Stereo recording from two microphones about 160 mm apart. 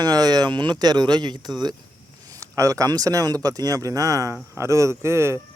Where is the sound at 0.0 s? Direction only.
25° right (ahead or behind).